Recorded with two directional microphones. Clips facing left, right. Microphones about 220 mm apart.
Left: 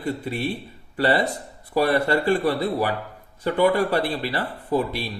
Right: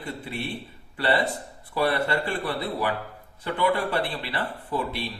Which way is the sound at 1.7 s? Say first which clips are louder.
Left 5 dB; 40° left (ahead or behind).